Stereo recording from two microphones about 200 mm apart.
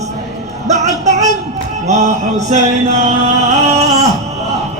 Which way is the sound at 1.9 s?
35° right (ahead or behind).